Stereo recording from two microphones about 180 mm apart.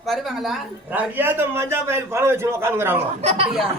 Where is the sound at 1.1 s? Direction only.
10° right (ahead or behind).